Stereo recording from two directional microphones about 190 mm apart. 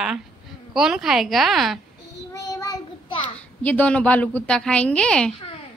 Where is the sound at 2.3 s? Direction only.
20° left (ahead or behind).